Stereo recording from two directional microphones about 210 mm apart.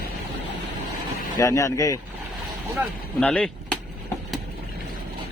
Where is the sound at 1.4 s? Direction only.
15° left (ahead or behind).